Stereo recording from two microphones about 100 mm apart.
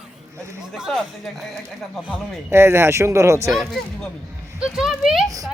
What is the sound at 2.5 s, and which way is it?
Speech, 25° right (ahead or behind).